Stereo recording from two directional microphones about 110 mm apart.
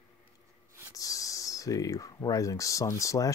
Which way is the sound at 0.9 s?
30° left (ahead or behind).